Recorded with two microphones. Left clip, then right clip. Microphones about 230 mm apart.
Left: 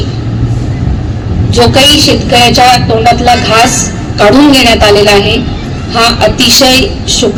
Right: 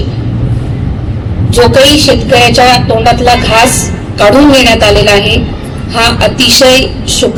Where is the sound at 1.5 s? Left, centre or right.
Right.